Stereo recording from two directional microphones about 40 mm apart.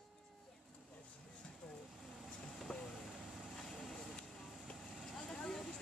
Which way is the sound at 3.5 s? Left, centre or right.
Centre.